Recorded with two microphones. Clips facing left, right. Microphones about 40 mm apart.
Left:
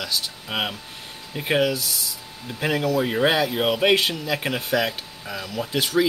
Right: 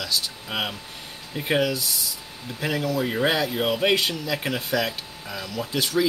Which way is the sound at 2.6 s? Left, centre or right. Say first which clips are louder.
Left 3 dB; left.